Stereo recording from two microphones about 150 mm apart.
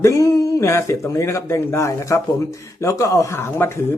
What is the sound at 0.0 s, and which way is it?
Speech, 20° left (ahead or behind).